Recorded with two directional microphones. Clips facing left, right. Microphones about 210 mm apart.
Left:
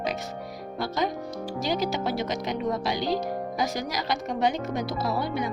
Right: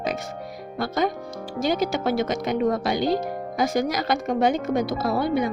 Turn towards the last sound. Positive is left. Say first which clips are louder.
# right 5 dB
turn(degrees=-50)  # may be behind; listen again after turning